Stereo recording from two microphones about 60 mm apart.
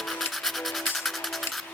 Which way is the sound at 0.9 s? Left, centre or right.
Centre.